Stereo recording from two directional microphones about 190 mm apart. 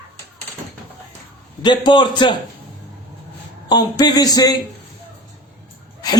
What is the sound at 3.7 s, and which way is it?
Speech, 20° left (ahead or behind).